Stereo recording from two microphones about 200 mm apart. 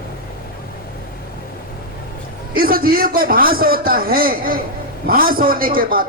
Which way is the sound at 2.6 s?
45° right (ahead or behind).